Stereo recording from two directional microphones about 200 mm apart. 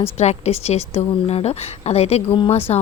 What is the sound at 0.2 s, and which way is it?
A woman's voice, 35° left (ahead or behind).